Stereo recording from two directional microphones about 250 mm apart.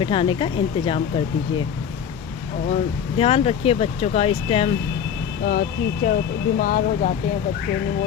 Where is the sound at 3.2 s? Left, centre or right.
Left.